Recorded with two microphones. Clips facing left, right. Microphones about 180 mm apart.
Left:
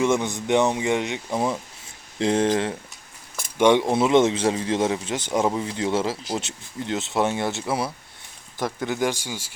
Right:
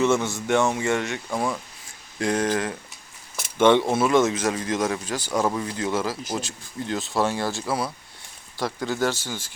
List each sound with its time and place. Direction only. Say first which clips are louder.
0.0 s speech: even; 15° left (ahead or behind)
3.6 s speech: even; 15° left (ahead or behind)